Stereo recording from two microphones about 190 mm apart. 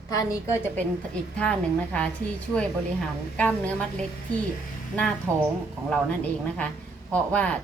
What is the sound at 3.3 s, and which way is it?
Speech, 5° left (ahead or behind).